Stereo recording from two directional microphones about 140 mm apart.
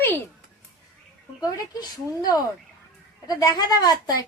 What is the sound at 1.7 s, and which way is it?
Speech, 30° left (ahead or behind).